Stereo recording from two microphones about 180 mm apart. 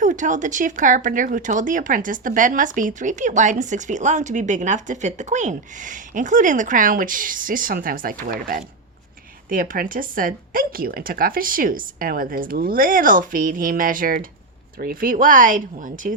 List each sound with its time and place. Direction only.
0.0 s speech: 45° right (ahead or behind)